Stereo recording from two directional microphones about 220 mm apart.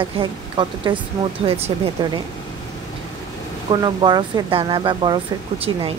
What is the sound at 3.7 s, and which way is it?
A woman's voice, 20° right (ahead or behind).